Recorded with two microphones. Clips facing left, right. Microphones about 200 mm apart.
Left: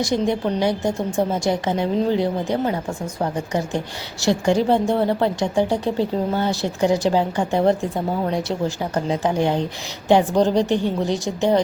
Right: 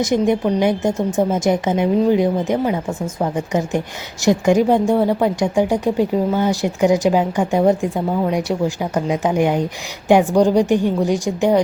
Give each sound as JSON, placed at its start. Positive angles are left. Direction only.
{"t": 0.0, "sound": "a woman's voice", "side_deg": -20}